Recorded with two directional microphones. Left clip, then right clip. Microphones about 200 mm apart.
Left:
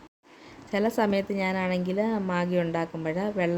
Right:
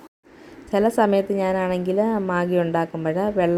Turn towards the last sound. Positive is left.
turn(degrees=-15)  # may be behind; listen again after turning